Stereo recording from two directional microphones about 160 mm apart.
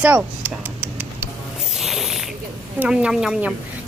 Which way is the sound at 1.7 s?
Centre (ahead or behind).